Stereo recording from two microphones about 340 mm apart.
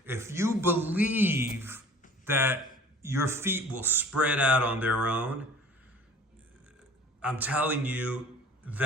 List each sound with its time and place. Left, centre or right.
0.0 s a man's voice: centre
7.2 s speech: centre